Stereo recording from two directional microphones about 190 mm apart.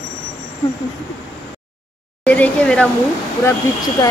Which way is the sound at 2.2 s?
5° left (ahead or behind).